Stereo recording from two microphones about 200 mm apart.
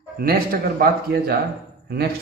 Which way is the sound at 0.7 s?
50° right (ahead or behind).